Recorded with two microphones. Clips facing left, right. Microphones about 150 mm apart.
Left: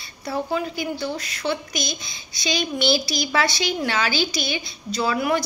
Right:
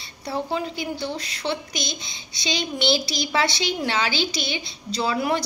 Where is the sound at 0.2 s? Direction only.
25° right (ahead or behind).